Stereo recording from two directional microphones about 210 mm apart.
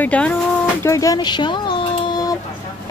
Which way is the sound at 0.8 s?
15° left (ahead or behind).